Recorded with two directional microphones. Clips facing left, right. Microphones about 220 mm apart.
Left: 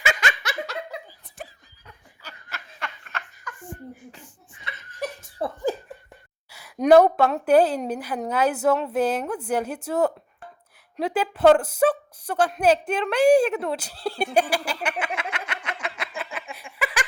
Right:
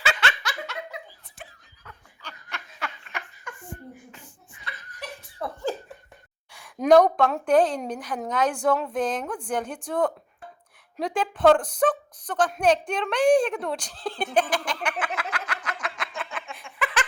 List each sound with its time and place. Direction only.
0.0 s laughter: 15° left (ahead or behind)
1.4 s snicker: 40° left (ahead or behind)
2.2 s snicker: centre (ahead or behind)
3.1 s laughter: 15° right (ahead or behind)
4.6 s laughter: 25° left (ahead or behind)
5.4 s speech: 30° left (ahead or behind)
6.5 s speech: 5° left (ahead or behind)
15.2 s a sound: 25° left (ahead or behind)
16.0 s a sound: 5° left (ahead or behind)